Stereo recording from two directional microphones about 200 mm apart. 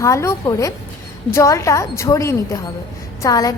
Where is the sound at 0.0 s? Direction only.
15° left (ahead or behind).